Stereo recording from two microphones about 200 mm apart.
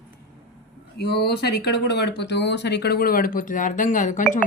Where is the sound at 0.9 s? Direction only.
55° left (ahead or behind).